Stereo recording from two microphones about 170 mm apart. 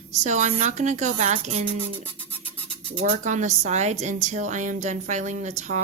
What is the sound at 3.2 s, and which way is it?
A woman's voice, 45° right (ahead or behind).